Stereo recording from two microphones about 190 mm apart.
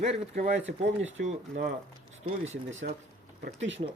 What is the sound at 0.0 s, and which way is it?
Speech, 35° right (ahead or behind).